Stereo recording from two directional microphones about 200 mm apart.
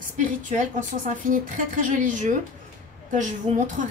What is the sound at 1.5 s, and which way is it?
Speech, 40° right (ahead or behind).